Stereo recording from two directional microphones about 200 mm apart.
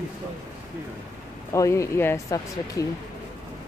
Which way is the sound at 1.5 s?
15° left (ahead or behind).